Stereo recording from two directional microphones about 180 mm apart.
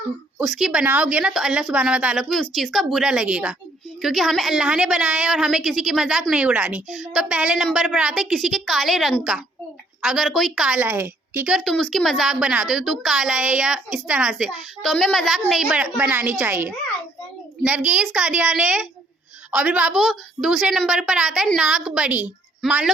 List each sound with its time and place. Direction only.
0.3 s a woman's voice: centre (ahead or behind)